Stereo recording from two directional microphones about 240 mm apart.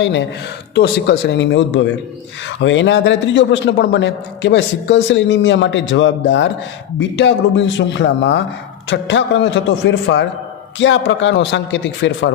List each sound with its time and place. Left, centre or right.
0.0 s a man's voice: left